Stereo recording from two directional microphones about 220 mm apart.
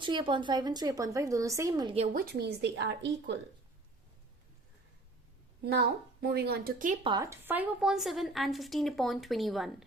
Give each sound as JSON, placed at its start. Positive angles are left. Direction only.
{"t": 0.0, "sound": "speech", "side_deg": -20}
{"t": 2.1, "sound": "speech", "side_deg": -50}
{"t": 6.2, "sound": "speech", "side_deg": -45}
{"t": 7.0, "sound": "a woman's voice", "side_deg": -20}